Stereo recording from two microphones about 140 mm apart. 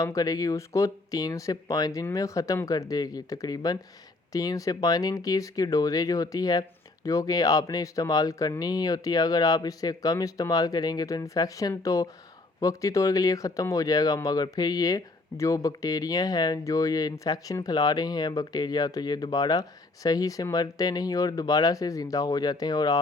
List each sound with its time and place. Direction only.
0.0 s speech: 25° left (ahead or behind)